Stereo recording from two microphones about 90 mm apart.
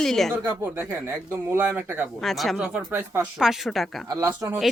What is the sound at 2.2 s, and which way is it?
Speech, centre (ahead or behind).